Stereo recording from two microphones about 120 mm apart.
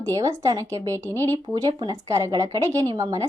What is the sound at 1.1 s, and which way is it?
Speech, 15° left (ahead or behind).